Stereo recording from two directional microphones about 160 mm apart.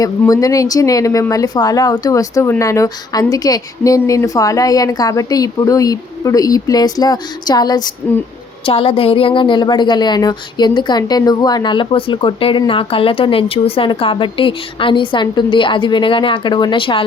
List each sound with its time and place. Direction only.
0.0 s speech: 20° left (ahead or behind)
8.6 s a woman's voice: 35° left (ahead or behind)